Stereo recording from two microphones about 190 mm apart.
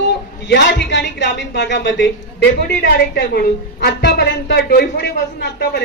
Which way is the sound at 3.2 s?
60° left (ahead or behind).